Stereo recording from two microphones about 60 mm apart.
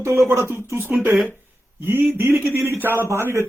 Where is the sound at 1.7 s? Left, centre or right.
Right.